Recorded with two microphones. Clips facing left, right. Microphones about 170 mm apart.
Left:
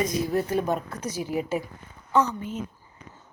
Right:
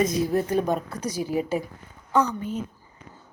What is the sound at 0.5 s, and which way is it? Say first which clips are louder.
Speech: right 2 dB; 15° right (ahead or behind).